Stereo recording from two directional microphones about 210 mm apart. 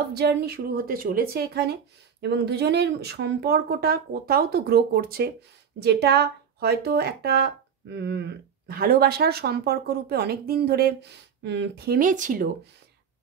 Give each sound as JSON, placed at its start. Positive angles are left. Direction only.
{"t": 0.1, "sound": "speech", "side_deg": -50}